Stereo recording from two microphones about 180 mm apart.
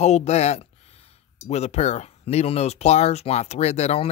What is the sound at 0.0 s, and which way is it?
Speech, 35° left (ahead or behind).